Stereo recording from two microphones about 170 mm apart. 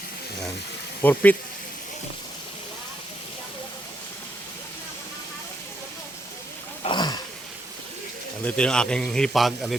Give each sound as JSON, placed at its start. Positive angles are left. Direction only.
{"t": 1.0, "sound": "speech", "side_deg": 10}
{"t": 6.8, "sound": "throat clearing", "side_deg": 25}
{"t": 8.4, "sound": "a man's voice", "side_deg": 5}